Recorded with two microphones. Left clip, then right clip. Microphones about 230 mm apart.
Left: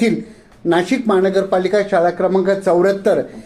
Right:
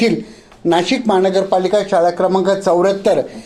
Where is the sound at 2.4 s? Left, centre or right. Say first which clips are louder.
Right 1 dB; right.